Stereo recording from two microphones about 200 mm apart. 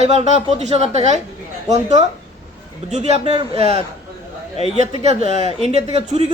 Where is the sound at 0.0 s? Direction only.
35° right (ahead or behind).